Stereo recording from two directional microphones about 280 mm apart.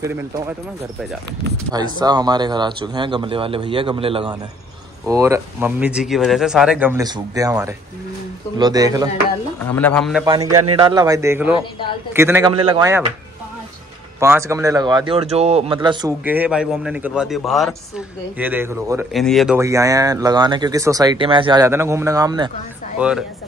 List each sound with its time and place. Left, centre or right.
0.0 s speech: centre
1.7 s speech: centre
9.6 s speech: centre
10.2 s speech: centre
10.5 s speech: right
10.8 s speech: centre
14.2 s speech: centre